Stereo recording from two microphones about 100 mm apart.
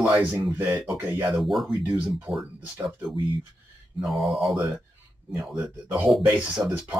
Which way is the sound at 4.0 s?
Centre (ahead or behind).